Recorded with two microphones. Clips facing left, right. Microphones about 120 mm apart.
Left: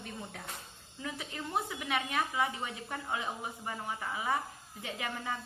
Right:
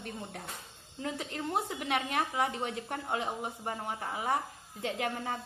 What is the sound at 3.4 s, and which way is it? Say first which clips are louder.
Speech: right 2 dB; 45° right (ahead or behind).